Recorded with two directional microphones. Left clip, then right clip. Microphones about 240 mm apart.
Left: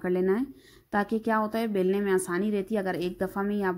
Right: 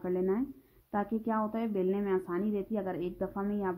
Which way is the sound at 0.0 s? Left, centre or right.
Left.